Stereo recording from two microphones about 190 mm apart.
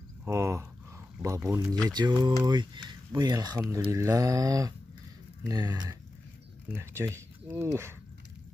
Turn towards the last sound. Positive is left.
turn(degrees=-15)  # may be behind; listen again after turning